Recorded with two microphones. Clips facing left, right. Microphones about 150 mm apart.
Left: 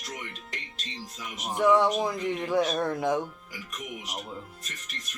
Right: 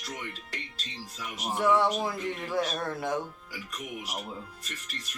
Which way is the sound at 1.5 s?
15° left (ahead or behind).